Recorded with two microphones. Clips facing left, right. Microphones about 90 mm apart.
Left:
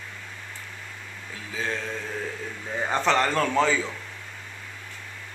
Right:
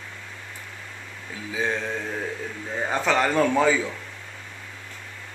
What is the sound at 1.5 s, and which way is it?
Speech, 20° right (ahead or behind).